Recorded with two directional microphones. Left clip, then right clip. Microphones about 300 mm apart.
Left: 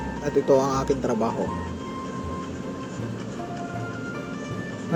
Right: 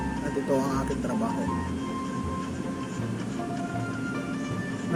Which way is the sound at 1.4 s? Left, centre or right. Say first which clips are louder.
Left 1 dB; centre.